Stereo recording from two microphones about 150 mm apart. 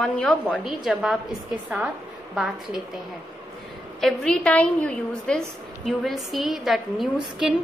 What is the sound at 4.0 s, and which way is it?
A woman's voice, 5° left (ahead or behind).